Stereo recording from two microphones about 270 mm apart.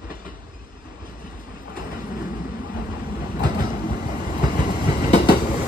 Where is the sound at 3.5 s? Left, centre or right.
Left.